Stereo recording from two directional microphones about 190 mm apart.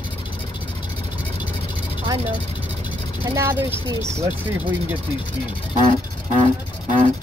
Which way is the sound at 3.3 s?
15° right (ahead or behind).